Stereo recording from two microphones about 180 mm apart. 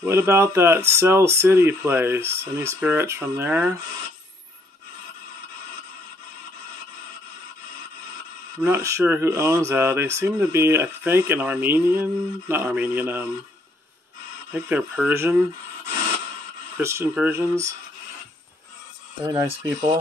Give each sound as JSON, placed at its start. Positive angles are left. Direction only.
{"t": 0.0, "sound": "speech", "side_deg": -15}
{"t": 8.6, "sound": "speech", "side_deg": -15}
{"t": 14.5, "sound": "speech", "side_deg": -10}
{"t": 16.7, "sound": "speech", "side_deg": -15}
{"t": 19.2, "sound": "speech", "side_deg": -20}